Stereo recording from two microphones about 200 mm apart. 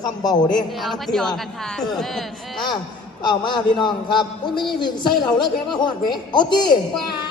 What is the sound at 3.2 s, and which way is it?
A man's voice, 25° left (ahead or behind).